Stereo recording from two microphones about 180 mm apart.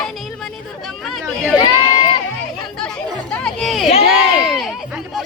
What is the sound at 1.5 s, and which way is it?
Run, 25° left (ahead or behind).